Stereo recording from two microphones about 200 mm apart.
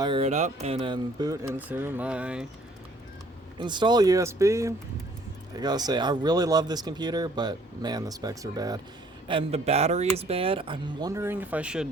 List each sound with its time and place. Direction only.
0.0 s speech: 30° right (ahead or behind); by 2.5 s 5° right (ahead or behind)
3.6 s speech: 20° right (ahead or behind)
11.1 s speech: 10° right (ahead or behind)